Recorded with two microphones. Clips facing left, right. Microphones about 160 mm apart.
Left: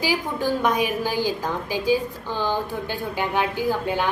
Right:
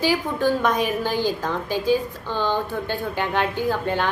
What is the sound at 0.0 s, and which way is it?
A woman's voice, 10° left (ahead or behind).